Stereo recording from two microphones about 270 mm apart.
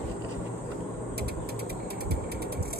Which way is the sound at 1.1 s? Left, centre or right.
Right.